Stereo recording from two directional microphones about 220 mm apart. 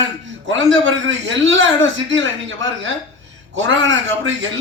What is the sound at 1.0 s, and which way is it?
Speech, 55° right (ahead or behind).